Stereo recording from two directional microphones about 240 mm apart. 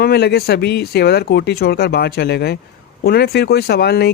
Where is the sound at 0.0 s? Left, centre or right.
Left.